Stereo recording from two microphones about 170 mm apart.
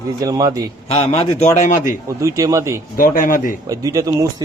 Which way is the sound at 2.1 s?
20° right (ahead or behind).